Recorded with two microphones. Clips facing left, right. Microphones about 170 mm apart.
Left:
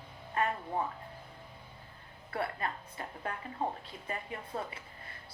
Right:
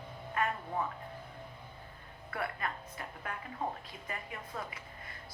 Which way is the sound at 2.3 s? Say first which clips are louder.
Left 2 dB; 30° left (ahead or behind).